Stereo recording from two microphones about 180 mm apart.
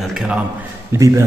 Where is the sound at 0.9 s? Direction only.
15° right (ahead or behind).